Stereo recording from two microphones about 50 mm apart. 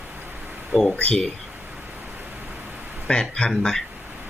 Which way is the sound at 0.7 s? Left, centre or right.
Centre.